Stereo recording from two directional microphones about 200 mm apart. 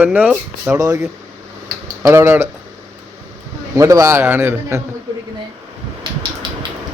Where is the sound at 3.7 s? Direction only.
15° right (ahead or behind).